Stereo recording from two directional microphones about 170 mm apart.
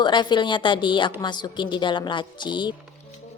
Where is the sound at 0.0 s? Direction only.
25° left (ahead or behind).